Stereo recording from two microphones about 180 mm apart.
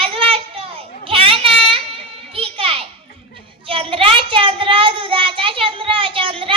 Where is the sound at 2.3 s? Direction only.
30° right (ahead or behind).